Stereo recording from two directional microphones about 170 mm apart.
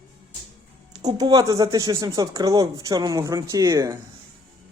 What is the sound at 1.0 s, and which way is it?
Speech, 25° right (ahead or behind).